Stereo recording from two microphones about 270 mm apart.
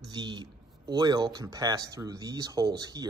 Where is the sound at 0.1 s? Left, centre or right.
Centre.